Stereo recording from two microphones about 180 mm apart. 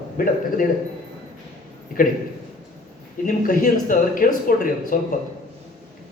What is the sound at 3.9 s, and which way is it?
A man's voice, 50° left (ahead or behind).